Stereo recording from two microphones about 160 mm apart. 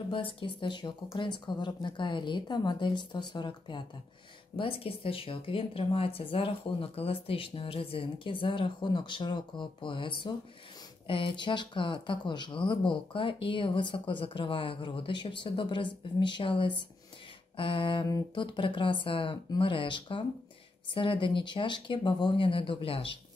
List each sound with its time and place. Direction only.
0.1 s a woman's voice: 30° left (ahead or behind)